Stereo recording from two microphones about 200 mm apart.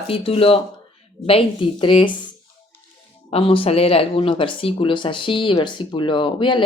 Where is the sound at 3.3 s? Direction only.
30° left (ahead or behind).